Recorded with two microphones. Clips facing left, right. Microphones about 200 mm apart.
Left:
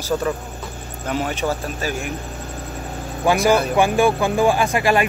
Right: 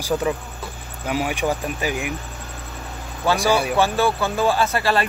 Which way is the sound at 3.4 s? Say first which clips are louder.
Left 3 dB; 10° right (ahead or behind).